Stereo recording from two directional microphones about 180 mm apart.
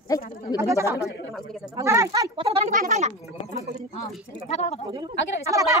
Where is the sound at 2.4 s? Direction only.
35° right (ahead or behind).